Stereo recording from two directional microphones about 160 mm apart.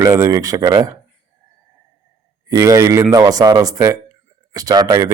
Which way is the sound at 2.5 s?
20° right (ahead or behind).